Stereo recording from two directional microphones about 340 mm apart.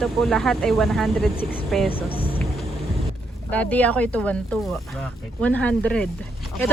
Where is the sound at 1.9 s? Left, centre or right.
Centre.